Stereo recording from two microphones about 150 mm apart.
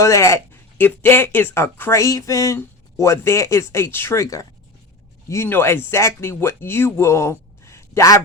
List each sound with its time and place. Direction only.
0.0 s speech: 20° left (ahead or behind)